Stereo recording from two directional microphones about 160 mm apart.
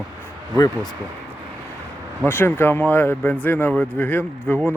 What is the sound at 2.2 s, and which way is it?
Speech, 15° left (ahead or behind).